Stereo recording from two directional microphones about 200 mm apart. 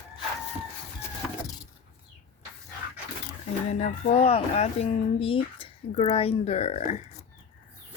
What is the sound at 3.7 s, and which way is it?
Speech, 35° left (ahead or behind).